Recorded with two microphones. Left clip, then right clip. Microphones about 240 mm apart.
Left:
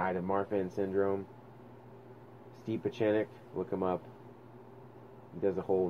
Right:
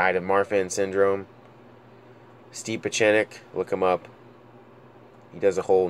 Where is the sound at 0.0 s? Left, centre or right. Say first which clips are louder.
Right 11 dB; right.